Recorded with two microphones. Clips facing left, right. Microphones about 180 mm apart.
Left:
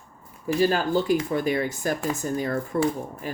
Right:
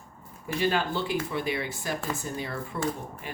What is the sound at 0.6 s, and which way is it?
Speech, 40° left (ahead or behind).